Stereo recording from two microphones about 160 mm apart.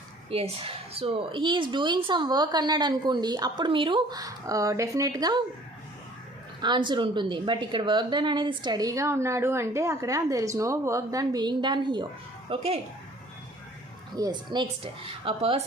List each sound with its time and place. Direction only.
0.3 s a woman's voice: 35° right (ahead or behind)
6.6 s a woman's voice: 30° right (ahead or behind)
14.2 s a woman's voice: 25° right (ahead or behind)